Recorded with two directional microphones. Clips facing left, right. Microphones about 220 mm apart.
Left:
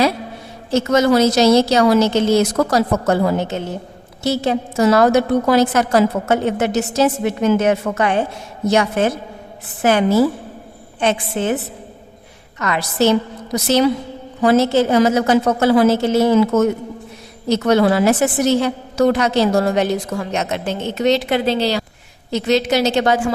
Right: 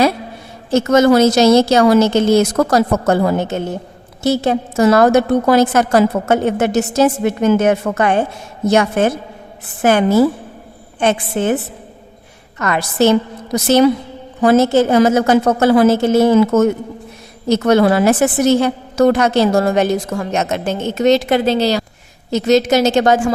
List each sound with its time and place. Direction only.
0.7 s a woman's voice: 50° right (ahead or behind)
11.0 s a woman's voice: 50° right (ahead or behind)
12.5 s a woman's voice: 50° right (ahead or behind)